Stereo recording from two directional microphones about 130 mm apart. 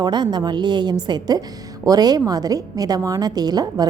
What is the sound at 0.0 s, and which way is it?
A woman's voice, 35° right (ahead or behind).